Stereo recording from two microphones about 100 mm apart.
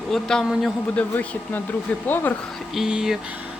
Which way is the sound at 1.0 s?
15° left (ahead or behind).